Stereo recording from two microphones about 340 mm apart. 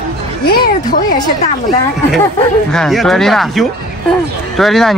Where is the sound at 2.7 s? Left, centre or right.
Centre.